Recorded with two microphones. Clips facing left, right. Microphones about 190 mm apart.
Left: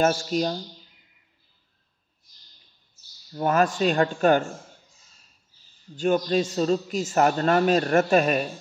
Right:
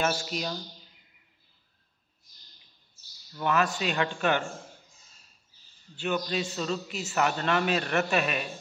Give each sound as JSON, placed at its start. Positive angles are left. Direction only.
{"t": 0.0, "sound": "speech", "side_deg": 40}
{"t": 3.3, "sound": "a man's voice", "side_deg": 45}
{"t": 5.9, "sound": "a man's voice", "side_deg": 45}